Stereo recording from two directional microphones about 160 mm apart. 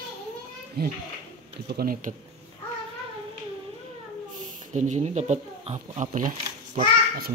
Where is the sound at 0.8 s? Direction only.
90° right.